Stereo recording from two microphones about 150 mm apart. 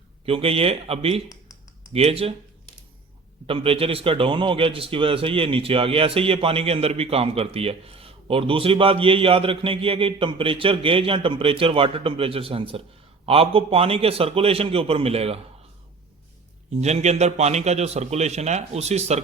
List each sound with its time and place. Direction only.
0.3 s a man's voice: 40° right (ahead or behind)
3.4 s a man's voice: 40° right (ahead or behind)
16.8 s a man's voice: 50° right (ahead or behind)